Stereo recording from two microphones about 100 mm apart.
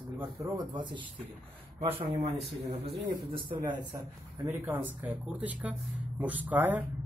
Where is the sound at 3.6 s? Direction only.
45° right (ahead or behind).